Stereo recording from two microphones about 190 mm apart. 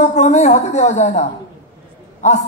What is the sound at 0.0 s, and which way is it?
A woman's voice, 40° left (ahead or behind).